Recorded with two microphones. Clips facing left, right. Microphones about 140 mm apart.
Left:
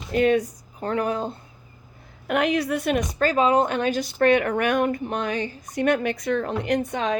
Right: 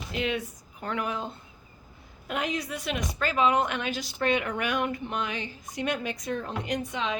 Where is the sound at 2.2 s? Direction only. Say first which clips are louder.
Left 9 dB; 65° left (ahead or behind).